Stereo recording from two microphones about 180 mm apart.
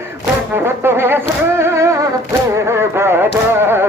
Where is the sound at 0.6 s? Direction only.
15° right (ahead or behind).